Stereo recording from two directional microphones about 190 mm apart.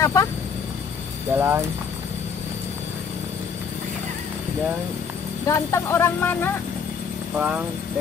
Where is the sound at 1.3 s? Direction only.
10° right (ahead or behind).